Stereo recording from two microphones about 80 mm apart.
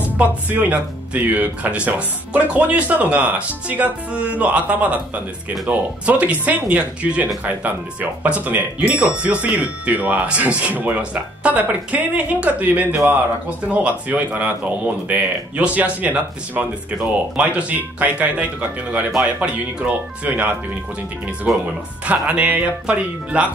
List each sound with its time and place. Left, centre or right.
0.2 s speech: right